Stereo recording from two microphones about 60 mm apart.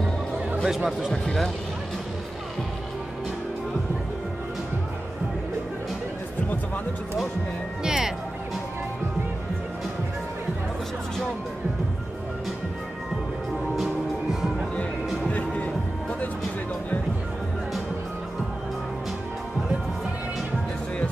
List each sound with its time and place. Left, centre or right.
0.7 s speech: centre
1.1 s speech: centre
7.8 s music: centre
15.2 s music: left